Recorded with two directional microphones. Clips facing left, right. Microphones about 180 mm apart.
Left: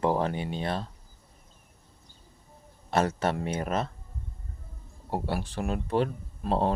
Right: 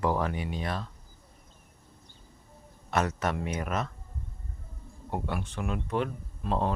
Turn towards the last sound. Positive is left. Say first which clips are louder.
# left 3 dB
turn(degrees=35)  # may be behind; listen again after turning